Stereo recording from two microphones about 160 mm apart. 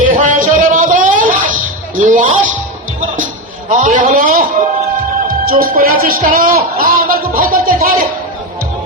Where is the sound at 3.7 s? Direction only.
50° right (ahead or behind).